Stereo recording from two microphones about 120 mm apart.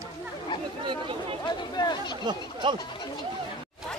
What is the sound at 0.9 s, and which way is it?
Speech, 45° right (ahead or behind).